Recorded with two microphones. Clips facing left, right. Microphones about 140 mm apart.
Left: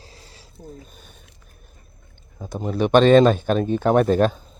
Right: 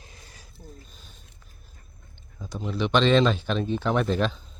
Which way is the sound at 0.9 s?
60° left (ahead or behind).